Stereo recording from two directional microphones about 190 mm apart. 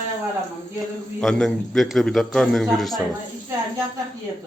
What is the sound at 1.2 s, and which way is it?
A man's voice, 5° left (ahead or behind).